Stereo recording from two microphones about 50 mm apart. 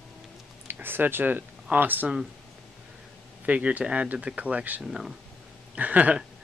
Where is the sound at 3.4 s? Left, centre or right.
Right.